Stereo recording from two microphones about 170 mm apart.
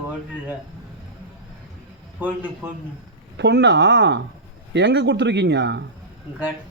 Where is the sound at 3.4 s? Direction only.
85° right.